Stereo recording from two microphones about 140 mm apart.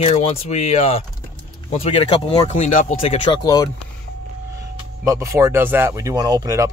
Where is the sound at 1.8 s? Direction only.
40° left (ahead or behind).